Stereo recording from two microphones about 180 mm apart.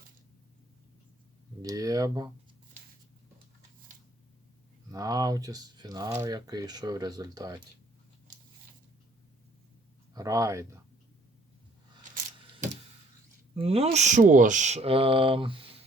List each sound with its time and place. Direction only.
1.6 s speech: 20° right (ahead or behind)
4.9 s speech: 20° right (ahead or behind)
10.2 s speech: 20° right (ahead or behind)
13.6 s speech: 35° right (ahead or behind)